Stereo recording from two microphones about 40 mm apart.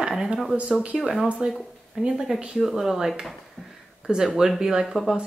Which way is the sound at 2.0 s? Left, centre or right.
Centre.